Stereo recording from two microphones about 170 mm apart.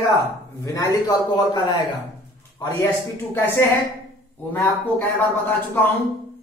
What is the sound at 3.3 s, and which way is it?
Speech, 15° left (ahead or behind).